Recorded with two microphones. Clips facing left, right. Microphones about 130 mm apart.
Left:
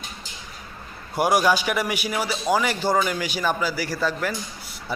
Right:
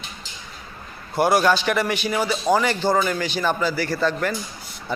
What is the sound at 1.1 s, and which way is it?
A man's voice, 10° left (ahead or behind).